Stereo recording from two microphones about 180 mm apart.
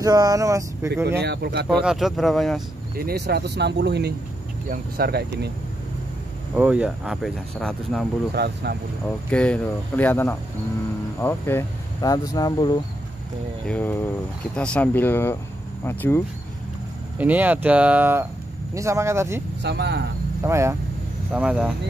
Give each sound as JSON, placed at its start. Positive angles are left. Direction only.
{"t": 0.0, "sound": "speech", "side_deg": -20}
{"t": 1.2, "sound": "speech", "side_deg": -65}
{"t": 1.7, "sound": "speech", "side_deg": -5}
{"t": 3.0, "sound": "speech", "side_deg": -60}
{"t": 6.5, "sound": "speech", "side_deg": -5}
{"t": 8.4, "sound": "speech", "side_deg": -70}
{"t": 9.3, "sound": "speech", "side_deg": 5}
{"t": 13.7, "sound": "speech", "side_deg": 10}
{"t": 17.2, "sound": "speech", "side_deg": -10}
{"t": 19.6, "sound": "speech", "side_deg": -65}
{"t": 20.4, "sound": "speech", "side_deg": -15}